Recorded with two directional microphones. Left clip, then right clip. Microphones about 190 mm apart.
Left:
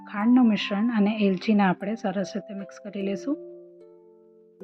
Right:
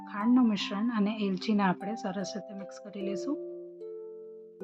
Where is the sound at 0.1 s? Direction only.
15° left (ahead or behind).